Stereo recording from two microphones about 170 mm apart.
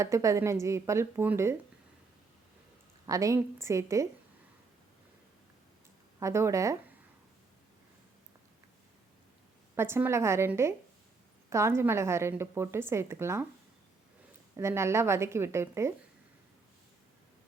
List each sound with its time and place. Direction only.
0.0 s a woman's voice: 20° right (ahead or behind)
3.1 s a woman's voice: 20° right (ahead or behind)
6.1 s a woman's voice: 15° right (ahead or behind)
9.7 s a woman's voice: 15° right (ahead or behind)
14.5 s a woman's voice: 15° right (ahead or behind)